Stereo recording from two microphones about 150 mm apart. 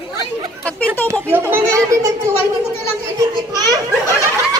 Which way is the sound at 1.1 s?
15° right (ahead or behind).